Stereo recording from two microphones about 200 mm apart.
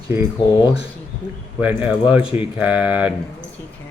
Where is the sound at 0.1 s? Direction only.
10° right (ahead or behind).